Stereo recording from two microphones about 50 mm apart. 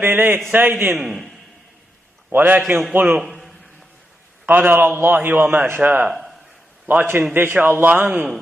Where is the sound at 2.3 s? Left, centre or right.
Right.